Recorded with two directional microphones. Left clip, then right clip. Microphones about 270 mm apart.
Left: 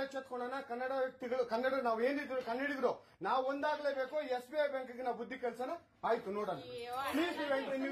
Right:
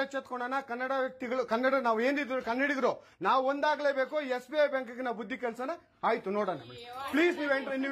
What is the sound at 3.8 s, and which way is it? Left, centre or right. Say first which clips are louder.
Speech: right 7 dB; right.